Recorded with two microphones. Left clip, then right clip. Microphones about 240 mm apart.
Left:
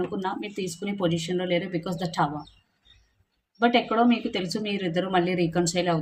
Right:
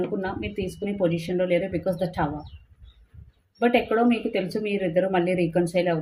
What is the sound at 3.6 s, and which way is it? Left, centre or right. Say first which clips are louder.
Speech: even; left.